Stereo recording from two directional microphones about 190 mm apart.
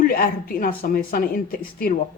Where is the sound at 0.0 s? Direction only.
50° left (ahead or behind).